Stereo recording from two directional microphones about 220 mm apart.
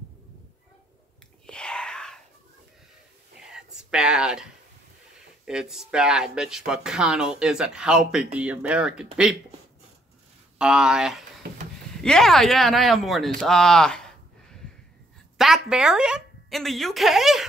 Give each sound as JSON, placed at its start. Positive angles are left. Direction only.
{"t": 1.4, "sound": "whispering", "side_deg": 5}
{"t": 3.3, "sound": "whispering", "side_deg": -5}
{"t": 5.4, "sound": "speech", "side_deg": -5}
{"t": 10.6, "sound": "speech", "side_deg": -5}
{"t": 13.4, "sound": "a sound", "side_deg": 0}
{"t": 15.3, "sound": "a woman's voice", "side_deg": 0}